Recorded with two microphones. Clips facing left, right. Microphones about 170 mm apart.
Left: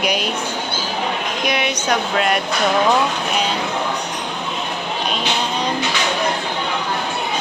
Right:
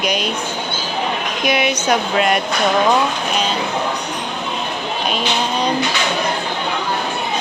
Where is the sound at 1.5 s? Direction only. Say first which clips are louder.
Right 4 dB; 10° right (ahead or behind).